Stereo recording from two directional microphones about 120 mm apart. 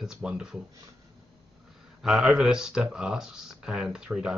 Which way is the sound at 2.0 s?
5° right (ahead or behind).